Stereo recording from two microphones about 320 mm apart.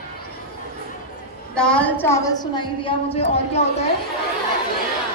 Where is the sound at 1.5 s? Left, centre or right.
Centre.